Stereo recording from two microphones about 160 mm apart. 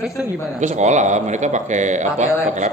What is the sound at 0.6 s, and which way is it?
A man's voice, 50° right (ahead or behind).